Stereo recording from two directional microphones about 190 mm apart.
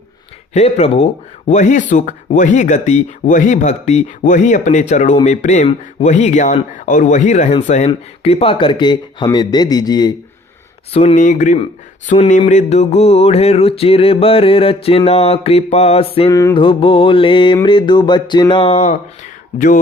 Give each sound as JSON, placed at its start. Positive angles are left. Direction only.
{"t": 0.5, "sound": "speech", "side_deg": 35}
{"t": 10.9, "sound": "speech", "side_deg": 35}
{"t": 16.3, "sound": "mantra", "side_deg": 15}
{"t": 19.5, "sound": "speech", "side_deg": 45}